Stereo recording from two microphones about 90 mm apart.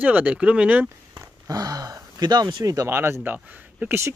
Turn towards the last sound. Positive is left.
turn(degrees=-20)  # may be behind; listen again after turning